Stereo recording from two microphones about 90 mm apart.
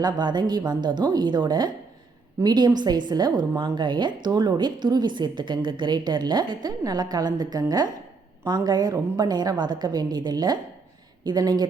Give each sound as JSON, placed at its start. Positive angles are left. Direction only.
{"t": 0.0, "sound": "a woman's voice", "side_deg": -50}